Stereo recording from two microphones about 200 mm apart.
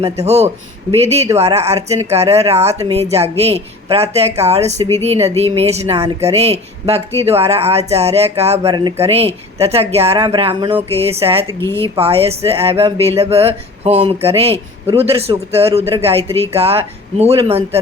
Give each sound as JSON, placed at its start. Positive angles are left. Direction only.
{"t": 0.0, "sound": "a woman's voice", "side_deg": -30}
{"t": 11.6, "sound": "speech", "side_deg": 10}
{"t": 11.9, "sound": "speech", "side_deg": -30}